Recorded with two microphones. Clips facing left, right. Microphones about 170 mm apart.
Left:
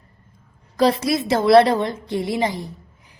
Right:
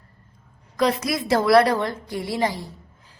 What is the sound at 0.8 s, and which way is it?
A woman's voice, 30° left (ahead or behind).